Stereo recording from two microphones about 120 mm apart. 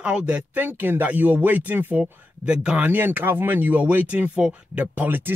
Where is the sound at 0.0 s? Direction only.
10° right (ahead or behind).